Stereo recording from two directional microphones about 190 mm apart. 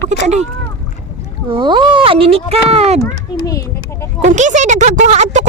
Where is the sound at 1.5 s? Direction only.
25° right (ahead or behind).